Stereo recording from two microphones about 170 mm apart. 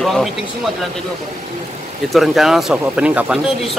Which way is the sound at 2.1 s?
Centre (ahead or behind).